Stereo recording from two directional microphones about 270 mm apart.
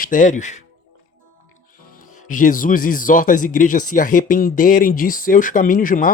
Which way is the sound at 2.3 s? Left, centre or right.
Left.